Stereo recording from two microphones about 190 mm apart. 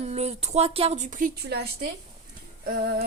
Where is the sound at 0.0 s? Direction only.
35° right (ahead or behind).